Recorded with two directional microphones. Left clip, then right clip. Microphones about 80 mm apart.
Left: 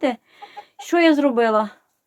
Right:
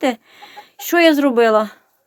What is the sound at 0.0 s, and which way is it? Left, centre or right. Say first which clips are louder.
Speech: right 3 dB; right.